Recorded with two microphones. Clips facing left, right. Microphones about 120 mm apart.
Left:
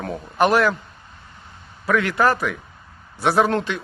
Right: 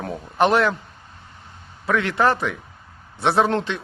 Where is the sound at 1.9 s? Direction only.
25° right (ahead or behind).